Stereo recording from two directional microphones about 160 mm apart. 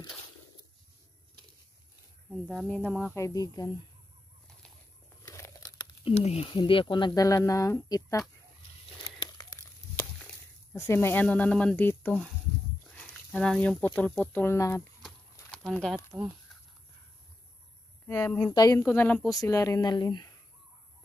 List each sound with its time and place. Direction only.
2.3 s speech: centre (ahead or behind)
2.8 s speech: 10° left (ahead or behind)
3.2 s speech: 20° left (ahead or behind)
5.2 s crumpling: 20° left (ahead or behind)
6.0 s speech: 40° left (ahead or behind); by 8.2 s 20° left (ahead or behind)
9.2 s crumpling: 15° left (ahead or behind)
10.7 s speech: 15° left (ahead or behind)
15.5 s speech: 5° left (ahead or behind)
18.0 s speech: 15° left (ahead or behind)
18.8 s speech: 10° left (ahead or behind)